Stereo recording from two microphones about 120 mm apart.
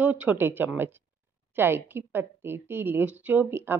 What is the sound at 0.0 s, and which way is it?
A woman's voice, 15° right (ahead or behind).